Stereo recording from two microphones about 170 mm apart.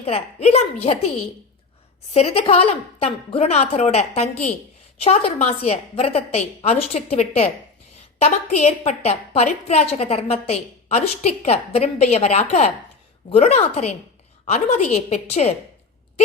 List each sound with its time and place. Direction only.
0.0 s a woman's voice: 35° left (ahead or behind)
2.1 s a woman's voice: 40° left (ahead or behind)